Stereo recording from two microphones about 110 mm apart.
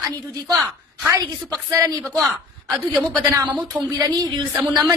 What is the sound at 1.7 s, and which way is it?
Speech, 30° right (ahead or behind).